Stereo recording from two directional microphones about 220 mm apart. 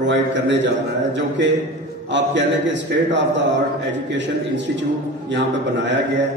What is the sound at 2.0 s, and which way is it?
A man's voice, 55° right (ahead or behind).